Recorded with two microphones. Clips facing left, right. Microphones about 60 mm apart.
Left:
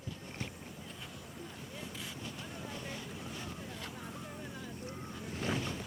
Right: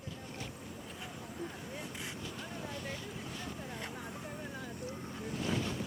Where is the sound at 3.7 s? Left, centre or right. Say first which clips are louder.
Right 2 dB; right.